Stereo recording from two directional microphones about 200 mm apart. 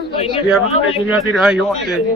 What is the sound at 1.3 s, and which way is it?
Speech, 5° right (ahead or behind).